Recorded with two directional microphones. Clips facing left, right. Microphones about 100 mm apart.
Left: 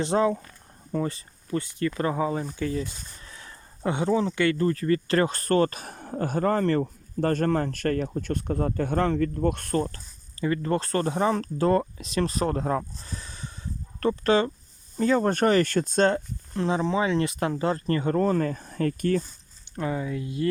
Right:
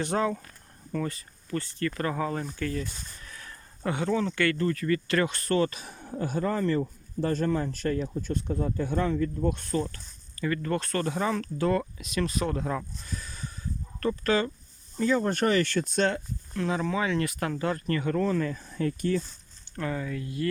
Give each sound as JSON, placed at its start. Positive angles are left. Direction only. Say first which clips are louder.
{"t": 0.0, "sound": "speech", "louder": "left 4 dB", "side_deg": 20}
{"t": 1.5, "sound": "speech", "louder": "left 3 dB", "side_deg": 15}
{"t": 10.4, "sound": "speech", "louder": "left 3 dB", "side_deg": 25}
{"t": 14.9, "sound": "speech", "louder": "left 3 dB", "side_deg": 40}
{"t": 19.7, "sound": "speech", "louder": "left 3 dB", "side_deg": 15}